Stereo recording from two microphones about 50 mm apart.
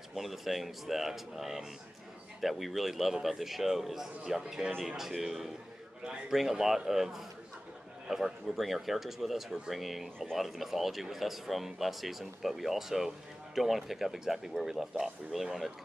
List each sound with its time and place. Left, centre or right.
0.1 s speech: centre
6.5 s speech: centre